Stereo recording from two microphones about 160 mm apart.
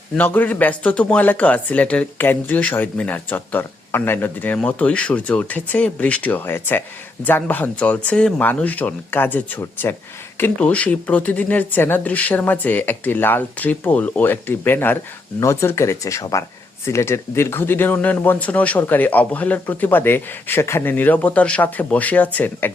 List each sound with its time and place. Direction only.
0.2 s speech: 10° left (ahead or behind)